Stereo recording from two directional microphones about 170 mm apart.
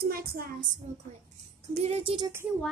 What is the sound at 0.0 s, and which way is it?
Speech, 60° right (ahead or behind).